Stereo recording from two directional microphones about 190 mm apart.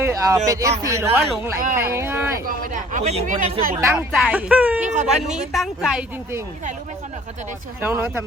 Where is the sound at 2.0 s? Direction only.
10° right (ahead or behind).